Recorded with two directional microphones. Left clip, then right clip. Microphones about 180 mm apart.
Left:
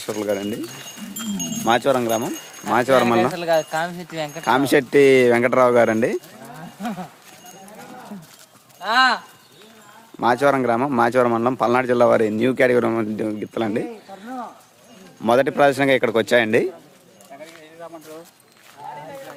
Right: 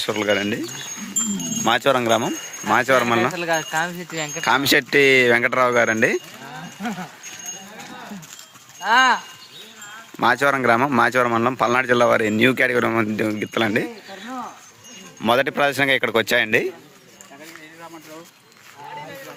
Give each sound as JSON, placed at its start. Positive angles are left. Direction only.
{"t": 0.0, "sound": "speech", "side_deg": 0}
{"t": 1.6, "sound": "speech", "side_deg": 0}
{"t": 3.3, "sound": "speech", "side_deg": 55}
{"t": 4.4, "sound": "speech", "side_deg": 10}
{"t": 8.8, "sound": "speech", "side_deg": 35}
{"t": 10.2, "sound": "speech", "side_deg": 0}
{"t": 15.2, "sound": "speech", "side_deg": 10}